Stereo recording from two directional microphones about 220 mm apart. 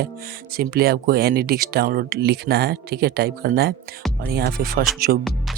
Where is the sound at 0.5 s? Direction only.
45° right (ahead or behind).